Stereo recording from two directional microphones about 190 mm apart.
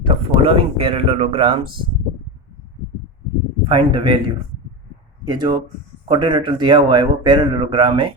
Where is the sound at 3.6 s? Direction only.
25° right (ahead or behind).